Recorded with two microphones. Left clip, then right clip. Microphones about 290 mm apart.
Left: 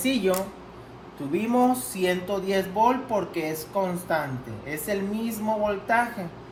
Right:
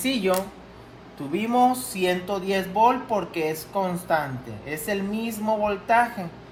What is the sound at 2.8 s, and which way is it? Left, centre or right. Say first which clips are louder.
Speech: right 3 dB; right.